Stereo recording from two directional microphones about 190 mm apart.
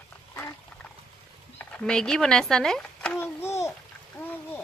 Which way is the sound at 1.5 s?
5° left (ahead or behind).